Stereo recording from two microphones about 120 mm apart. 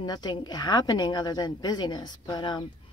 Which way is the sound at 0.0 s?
35° left (ahead or behind).